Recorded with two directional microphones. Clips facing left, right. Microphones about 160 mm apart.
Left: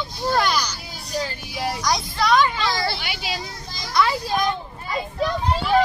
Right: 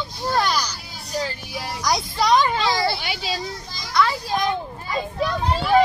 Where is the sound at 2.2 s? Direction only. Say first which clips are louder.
Even; 20° right (ahead or behind).